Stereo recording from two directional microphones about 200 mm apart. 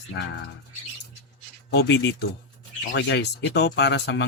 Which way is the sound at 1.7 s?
60° left (ahead or behind).